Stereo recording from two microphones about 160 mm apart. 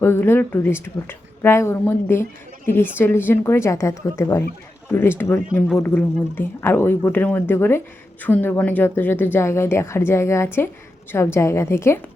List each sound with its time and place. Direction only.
0.0 s speech: 15° left (ahead or behind)